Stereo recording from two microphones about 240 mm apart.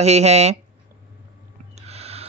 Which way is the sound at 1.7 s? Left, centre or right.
Right.